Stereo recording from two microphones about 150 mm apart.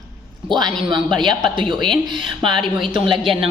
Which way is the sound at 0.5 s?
30° right (ahead or behind).